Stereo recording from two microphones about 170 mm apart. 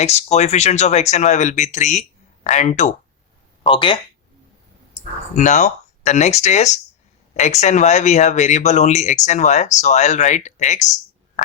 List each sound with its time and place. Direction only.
0.0 s speech: 40° left (ahead or behind)
3.7 s speech: 30° left (ahead or behind)
5.3 s speech: 45° left (ahead or behind)